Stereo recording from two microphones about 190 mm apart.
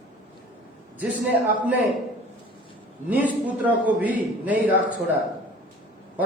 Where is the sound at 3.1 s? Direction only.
10° right (ahead or behind).